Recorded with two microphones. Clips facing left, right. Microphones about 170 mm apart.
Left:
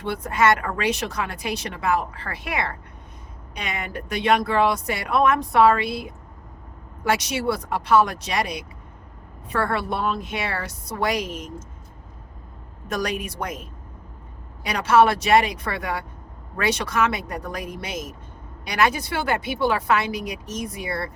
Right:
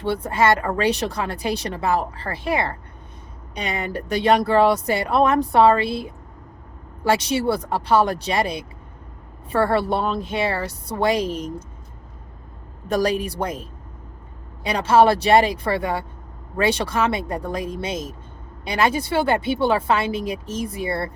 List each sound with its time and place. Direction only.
0.0 s speech: 30° right (ahead or behind)
12.9 s speech: 30° right (ahead or behind)